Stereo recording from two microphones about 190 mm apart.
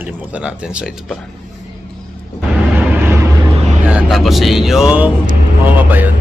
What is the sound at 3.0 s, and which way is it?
Vehicle, 15° right (ahead or behind).